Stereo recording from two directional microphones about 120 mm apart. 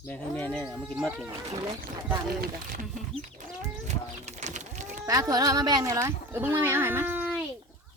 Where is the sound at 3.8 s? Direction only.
70° right (ahead or behind); by 5.0 s 90° right.